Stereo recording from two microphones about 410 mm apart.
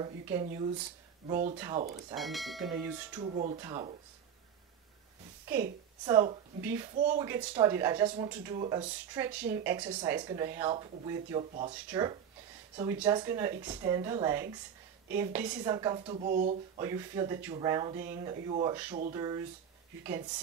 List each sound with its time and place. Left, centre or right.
0.0 s speech: centre
3.3 s speech: centre
6.0 s speech: centre
7.0 s speech: centre
7.2 s speech: centre
16.8 s speech: centre